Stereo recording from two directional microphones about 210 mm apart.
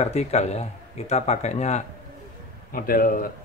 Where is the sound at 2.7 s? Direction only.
45° left (ahead or behind).